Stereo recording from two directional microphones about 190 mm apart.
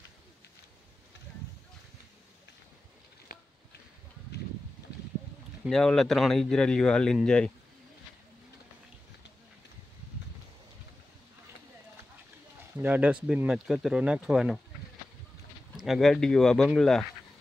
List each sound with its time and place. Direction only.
3.3 s a sound: 50° left (ahead or behind)
5.6 s speech: centre (ahead or behind)
12.7 s speech: 10° right (ahead or behind)
15.7 s speech: centre (ahead or behind)